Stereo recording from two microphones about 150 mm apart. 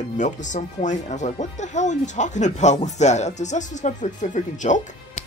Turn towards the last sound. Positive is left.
turn(degrees=55)  # may be behind; listen again after turning